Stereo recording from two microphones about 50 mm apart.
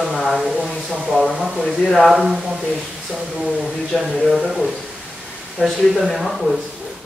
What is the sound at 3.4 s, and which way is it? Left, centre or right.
Speech, right.